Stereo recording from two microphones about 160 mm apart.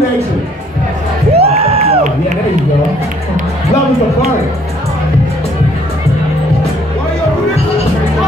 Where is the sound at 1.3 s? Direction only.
40° right (ahead or behind).